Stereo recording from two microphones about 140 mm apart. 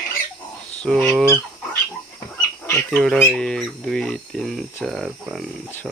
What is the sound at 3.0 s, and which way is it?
Speech, centre (ahead or behind).